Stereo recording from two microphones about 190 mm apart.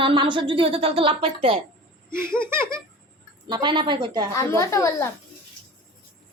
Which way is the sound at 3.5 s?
25° right (ahead or behind).